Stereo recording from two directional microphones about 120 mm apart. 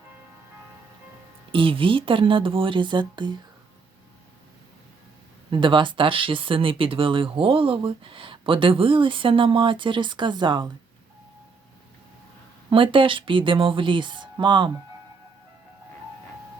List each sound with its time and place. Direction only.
1.5 s speech: 45° right (ahead or behind)
5.5 s speech: 45° right (ahead or behind)
12.7 s speech: 45° right (ahead or behind)